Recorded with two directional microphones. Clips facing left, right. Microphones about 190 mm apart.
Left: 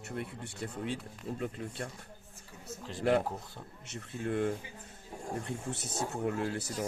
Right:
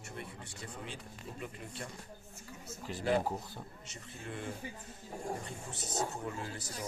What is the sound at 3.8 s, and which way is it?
Speech, 60° left (ahead or behind).